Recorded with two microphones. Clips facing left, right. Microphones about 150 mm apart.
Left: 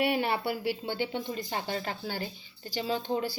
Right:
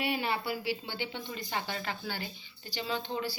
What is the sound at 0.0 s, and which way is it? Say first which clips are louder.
A woman's voice: left 4 dB; 55° left (ahead or behind).